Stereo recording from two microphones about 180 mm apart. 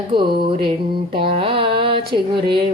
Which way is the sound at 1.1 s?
30° right (ahead or behind).